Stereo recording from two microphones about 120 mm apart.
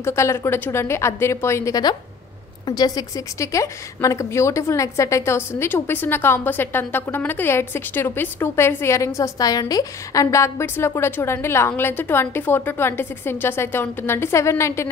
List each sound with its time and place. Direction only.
0.0 s a woman's voice: 25° left (ahead or behind)